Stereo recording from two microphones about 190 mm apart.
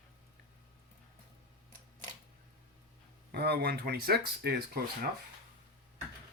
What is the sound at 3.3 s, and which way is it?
Speech, 55° right (ahead or behind).